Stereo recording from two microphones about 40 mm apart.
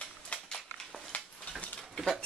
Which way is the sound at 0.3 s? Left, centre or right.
Left.